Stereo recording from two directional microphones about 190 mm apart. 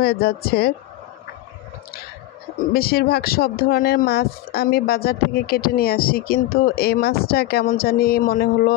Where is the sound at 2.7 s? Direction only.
50° left (ahead or behind).